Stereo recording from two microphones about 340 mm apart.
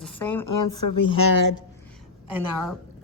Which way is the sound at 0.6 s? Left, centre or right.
Left.